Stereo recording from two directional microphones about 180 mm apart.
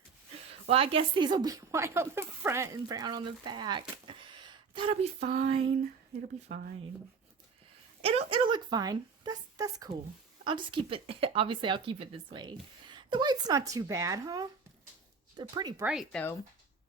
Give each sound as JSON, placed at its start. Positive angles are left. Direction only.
{"t": 0.7, "sound": "speech", "side_deg": -30}
{"t": 8.0, "sound": "speech", "side_deg": -30}
{"t": 15.8, "sound": "speech", "side_deg": -5}